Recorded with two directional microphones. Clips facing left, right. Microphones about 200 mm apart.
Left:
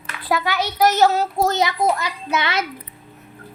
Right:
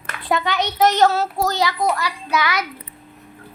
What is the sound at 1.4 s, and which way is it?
A child's voice, 20° left (ahead or behind).